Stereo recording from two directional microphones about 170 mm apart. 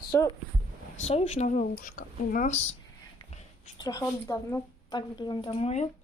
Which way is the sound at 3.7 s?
20° left (ahead or behind).